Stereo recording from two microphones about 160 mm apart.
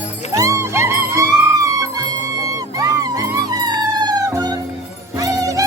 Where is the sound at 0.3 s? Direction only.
20° right (ahead or behind).